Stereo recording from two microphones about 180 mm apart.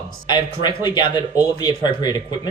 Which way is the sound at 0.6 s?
25° left (ahead or behind).